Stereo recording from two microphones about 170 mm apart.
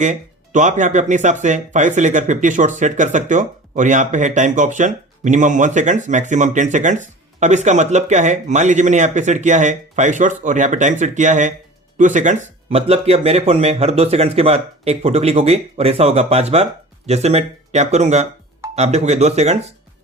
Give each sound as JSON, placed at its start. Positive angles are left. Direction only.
{"t": 0.0, "sound": "speech", "side_deg": -45}